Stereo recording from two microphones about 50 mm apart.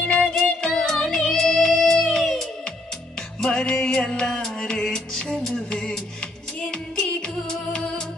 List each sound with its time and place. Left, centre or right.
0.0 s music: centre
3.4 s music: centre